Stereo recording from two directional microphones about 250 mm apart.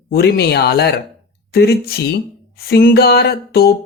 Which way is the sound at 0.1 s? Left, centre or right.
Left.